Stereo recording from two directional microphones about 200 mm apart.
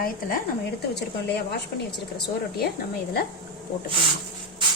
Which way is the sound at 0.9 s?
55° left (ahead or behind).